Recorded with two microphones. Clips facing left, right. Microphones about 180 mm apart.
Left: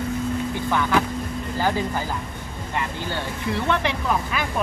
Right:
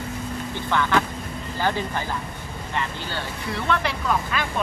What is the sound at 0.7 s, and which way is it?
Speech, 10° left (ahead or behind).